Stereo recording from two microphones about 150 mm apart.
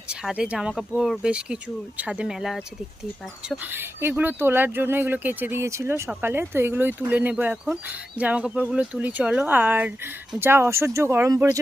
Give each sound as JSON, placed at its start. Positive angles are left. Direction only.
{"t": 0.1, "sound": "speech", "side_deg": -5}
{"t": 3.6, "sound": "speech", "side_deg": -15}